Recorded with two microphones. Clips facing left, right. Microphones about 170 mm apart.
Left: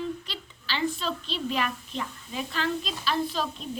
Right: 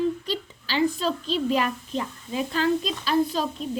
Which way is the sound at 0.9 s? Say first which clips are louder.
Right 6 dB; 40° right (ahead or behind).